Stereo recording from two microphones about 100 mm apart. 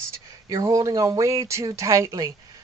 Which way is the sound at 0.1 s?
35° right (ahead or behind).